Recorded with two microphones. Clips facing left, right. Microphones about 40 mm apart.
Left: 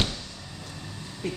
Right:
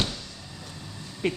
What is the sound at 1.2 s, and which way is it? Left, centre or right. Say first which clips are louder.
Speech: right 5 dB; right.